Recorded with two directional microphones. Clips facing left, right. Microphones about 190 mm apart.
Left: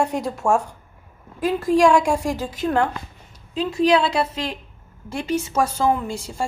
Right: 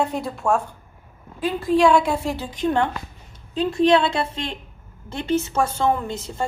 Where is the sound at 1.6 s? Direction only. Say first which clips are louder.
Even; 10° left (ahead or behind).